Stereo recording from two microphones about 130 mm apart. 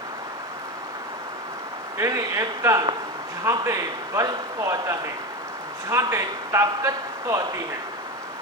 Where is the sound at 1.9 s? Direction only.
25° right (ahead or behind).